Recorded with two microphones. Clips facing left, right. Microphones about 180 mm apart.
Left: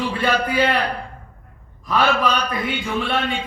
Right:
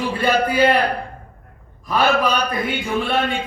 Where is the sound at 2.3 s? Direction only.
45° right (ahead or behind).